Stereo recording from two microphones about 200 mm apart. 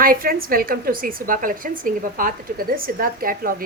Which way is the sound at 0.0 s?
45° right (ahead or behind).